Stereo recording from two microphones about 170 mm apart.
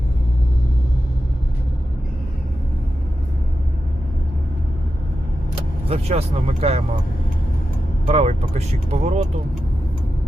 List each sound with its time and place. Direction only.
5.9 s speech: 35° right (ahead or behind)
8.0 s speech: 40° right (ahead or behind)